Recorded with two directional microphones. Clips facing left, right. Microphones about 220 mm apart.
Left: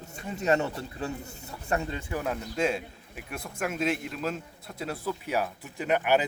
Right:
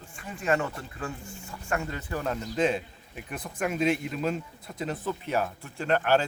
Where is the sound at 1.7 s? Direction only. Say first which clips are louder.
Left 1 dB; 20° left (ahead or behind).